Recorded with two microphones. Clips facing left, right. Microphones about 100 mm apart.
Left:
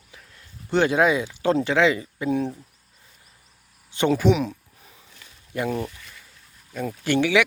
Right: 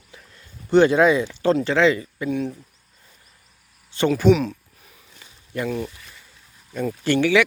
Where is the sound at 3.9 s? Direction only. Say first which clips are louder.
Right 3 dB; 15° left (ahead or behind).